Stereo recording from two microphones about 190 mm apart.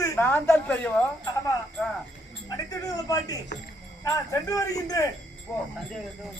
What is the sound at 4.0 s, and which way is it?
Speech, 15° left (ahead or behind).